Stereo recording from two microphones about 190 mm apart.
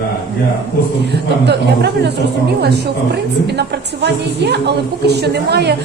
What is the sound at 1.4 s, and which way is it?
A woman's voice, 65° right (ahead or behind).